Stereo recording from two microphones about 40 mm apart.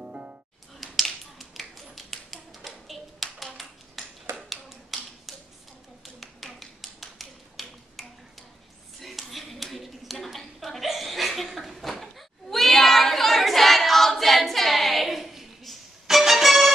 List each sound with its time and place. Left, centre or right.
0.0 s music: right
0.7 s tap: centre
4.0 s finger snapping: centre
4.5 s tap: centre
9.0 s a sound: centre
10.1 s chuckle: centre